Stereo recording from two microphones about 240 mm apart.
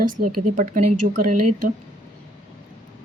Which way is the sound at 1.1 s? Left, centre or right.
Right.